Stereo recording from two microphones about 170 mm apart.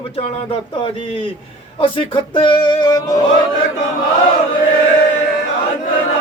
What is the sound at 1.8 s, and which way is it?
Speech, 30° left (ahead or behind).